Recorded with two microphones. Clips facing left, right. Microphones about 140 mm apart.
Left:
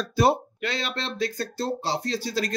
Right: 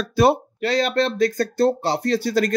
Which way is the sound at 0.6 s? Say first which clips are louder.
Right 10 dB; 40° right (ahead or behind).